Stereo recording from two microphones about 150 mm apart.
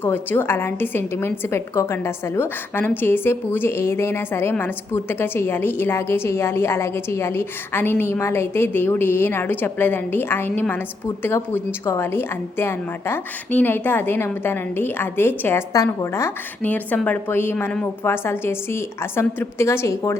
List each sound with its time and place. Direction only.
0.0 s a woman's voice: 15° left (ahead or behind)